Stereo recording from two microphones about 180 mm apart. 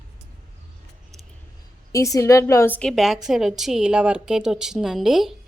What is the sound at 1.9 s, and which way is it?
A woman's voice, 20° left (ahead or behind).